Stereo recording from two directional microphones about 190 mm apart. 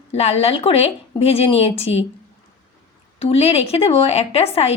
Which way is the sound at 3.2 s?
30° left (ahead or behind).